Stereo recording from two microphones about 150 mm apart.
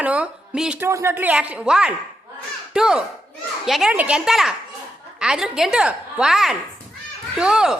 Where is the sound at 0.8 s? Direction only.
15° right (ahead or behind).